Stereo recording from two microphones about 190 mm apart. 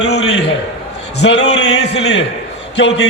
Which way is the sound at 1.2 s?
65° left (ahead or behind).